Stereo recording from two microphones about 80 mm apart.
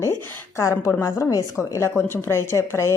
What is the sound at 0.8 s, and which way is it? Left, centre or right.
A woman's voice, left.